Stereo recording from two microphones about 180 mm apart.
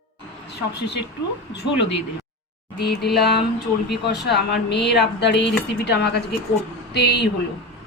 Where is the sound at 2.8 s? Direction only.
65° left (ahead or behind).